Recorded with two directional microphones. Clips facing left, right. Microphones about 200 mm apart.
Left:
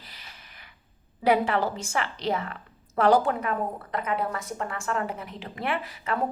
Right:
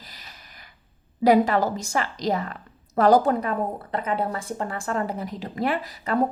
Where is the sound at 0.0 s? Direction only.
40° right (ahead or behind).